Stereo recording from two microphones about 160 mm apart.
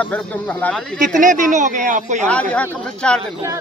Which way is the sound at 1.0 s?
55° right (ahead or behind).